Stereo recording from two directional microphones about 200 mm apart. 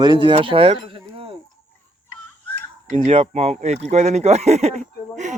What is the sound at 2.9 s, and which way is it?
Speech, 30° right (ahead or behind).